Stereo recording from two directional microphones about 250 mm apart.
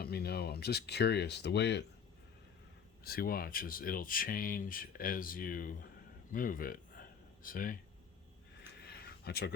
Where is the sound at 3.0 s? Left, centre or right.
Left.